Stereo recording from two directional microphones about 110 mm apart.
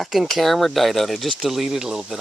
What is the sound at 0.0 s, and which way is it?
Speech, centre (ahead or behind).